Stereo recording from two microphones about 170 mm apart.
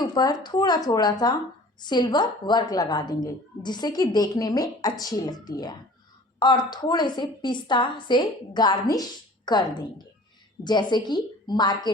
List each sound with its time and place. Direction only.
0.0 s a woman's voice: 25° left (ahead or behind)